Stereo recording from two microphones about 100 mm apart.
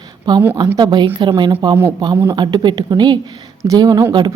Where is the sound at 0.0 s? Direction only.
45° right (ahead or behind).